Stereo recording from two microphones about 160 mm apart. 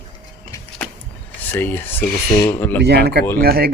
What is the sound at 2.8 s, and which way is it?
Speech, 90° right.